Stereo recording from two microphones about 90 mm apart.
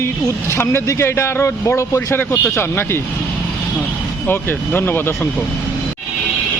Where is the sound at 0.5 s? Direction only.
30° left (ahead or behind).